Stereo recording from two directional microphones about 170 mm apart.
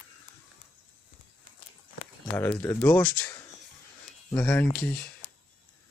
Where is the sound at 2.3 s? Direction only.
10° left (ahead or behind).